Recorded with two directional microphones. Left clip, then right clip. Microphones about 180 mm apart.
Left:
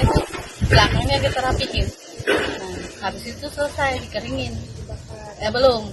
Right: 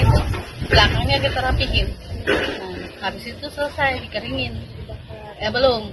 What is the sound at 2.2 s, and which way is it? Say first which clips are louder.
Speech: even; 40° right (ahead or behind).